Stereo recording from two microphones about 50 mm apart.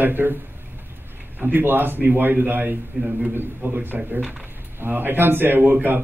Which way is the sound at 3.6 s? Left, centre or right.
Right.